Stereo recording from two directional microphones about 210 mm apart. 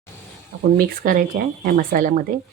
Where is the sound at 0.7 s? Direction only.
40° right (ahead or behind).